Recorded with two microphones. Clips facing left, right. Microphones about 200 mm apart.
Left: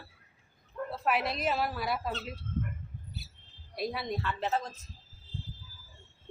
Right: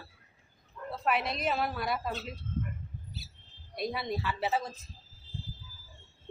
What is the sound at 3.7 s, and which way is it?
A woman's voice, centre (ahead or behind).